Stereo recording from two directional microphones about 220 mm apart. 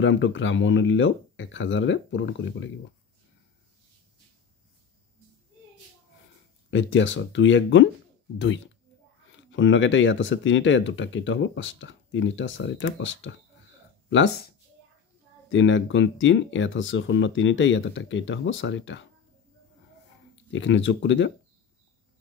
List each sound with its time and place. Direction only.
0.0 s speech: 60° left (ahead or behind)
6.7 s speech: 60° left (ahead or behind)
9.4 s speech: 55° left (ahead or behind)
15.5 s speech: 60° left (ahead or behind)
20.5 s speech: 60° left (ahead or behind)